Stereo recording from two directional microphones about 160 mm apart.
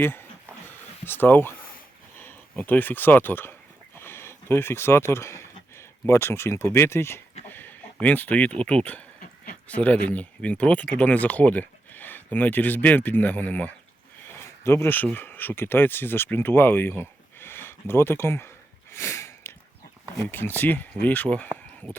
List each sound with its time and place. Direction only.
0.0 s speech: 15° left (ahead or behind)